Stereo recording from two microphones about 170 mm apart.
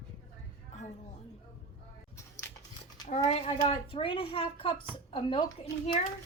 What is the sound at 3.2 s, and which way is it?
Speech, 35° left (ahead or behind).